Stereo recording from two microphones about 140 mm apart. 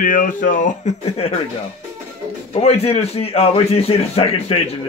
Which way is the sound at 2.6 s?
45° left (ahead or behind).